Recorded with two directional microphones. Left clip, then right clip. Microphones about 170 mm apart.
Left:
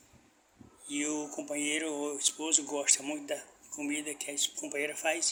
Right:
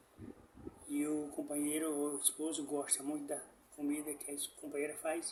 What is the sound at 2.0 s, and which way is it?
Speech, 10° right (ahead or behind).